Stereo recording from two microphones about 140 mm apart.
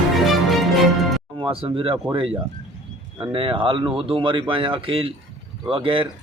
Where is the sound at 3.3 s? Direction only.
40° right (ahead or behind).